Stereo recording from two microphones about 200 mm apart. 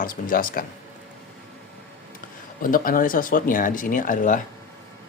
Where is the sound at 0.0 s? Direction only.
45° left (ahead or behind).